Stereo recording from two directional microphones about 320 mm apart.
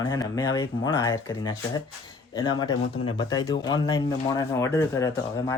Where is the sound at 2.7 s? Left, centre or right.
Left.